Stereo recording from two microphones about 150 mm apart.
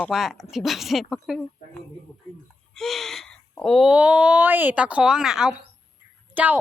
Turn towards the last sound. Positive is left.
turn(degrees=-10)  # may be behind; listen again after turning